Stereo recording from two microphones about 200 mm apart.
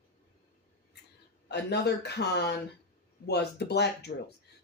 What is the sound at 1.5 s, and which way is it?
Speech, 55° left (ahead or behind).